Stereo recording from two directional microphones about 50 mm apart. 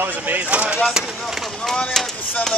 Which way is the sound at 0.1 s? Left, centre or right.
Right.